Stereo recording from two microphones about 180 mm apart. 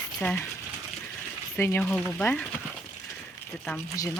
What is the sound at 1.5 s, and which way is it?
Speech, 10° left (ahead or behind).